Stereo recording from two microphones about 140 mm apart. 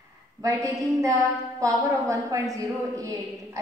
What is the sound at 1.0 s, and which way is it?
A woman's voice, 25° right (ahead or behind).